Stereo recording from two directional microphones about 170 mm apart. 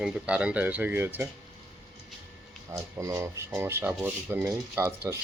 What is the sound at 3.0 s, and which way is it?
Speech, 15° right (ahead or behind).